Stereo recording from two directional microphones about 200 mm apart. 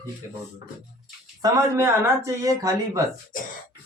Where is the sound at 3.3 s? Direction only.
40° left (ahead or behind).